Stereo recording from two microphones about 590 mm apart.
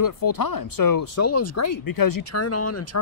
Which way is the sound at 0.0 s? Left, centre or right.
Left.